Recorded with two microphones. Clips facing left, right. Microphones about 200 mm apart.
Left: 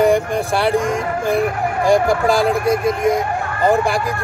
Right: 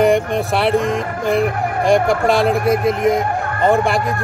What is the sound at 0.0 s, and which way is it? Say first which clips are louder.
Speech: even; centre (ahead or behind).